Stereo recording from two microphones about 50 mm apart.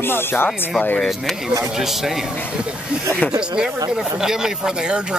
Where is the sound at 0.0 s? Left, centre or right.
Left.